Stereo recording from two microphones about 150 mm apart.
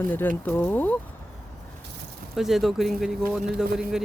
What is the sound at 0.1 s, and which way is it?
Speech, 15° left (ahead or behind).